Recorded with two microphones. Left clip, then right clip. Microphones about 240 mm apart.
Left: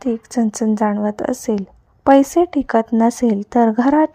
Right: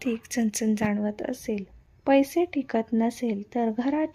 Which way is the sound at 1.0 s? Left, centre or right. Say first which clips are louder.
Left 10 dB; left.